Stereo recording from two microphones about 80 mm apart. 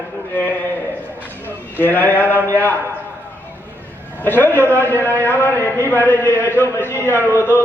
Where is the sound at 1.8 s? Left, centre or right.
Left.